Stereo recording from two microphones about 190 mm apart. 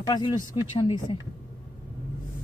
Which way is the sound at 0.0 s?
20° left (ahead or behind).